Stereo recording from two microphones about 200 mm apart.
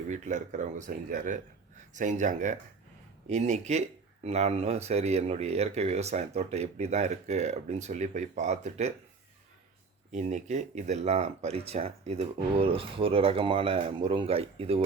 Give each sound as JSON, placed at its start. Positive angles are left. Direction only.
{"t": 0.1, "sound": "speech", "side_deg": -35}
{"t": 10.1, "sound": "speech", "side_deg": -35}